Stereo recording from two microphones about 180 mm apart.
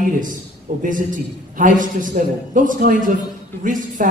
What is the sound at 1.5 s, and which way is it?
A man's voice, 45° right (ahead or behind).